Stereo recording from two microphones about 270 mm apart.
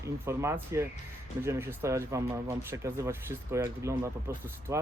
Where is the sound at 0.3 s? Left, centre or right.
Centre.